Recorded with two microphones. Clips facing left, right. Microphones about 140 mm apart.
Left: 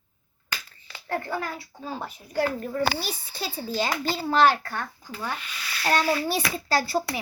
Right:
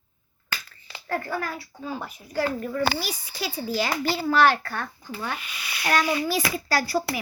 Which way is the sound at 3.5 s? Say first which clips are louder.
Right 2 dB; 10° right (ahead or behind).